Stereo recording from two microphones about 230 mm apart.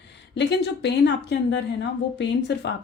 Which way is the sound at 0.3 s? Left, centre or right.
Left.